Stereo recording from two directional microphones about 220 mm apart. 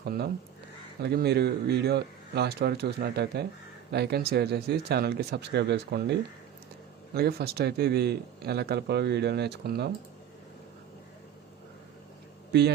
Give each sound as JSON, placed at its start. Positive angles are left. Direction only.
{"t": 0.0, "sound": "a man's voice", "side_deg": -45}
{"t": 12.5, "sound": "speech", "side_deg": -50}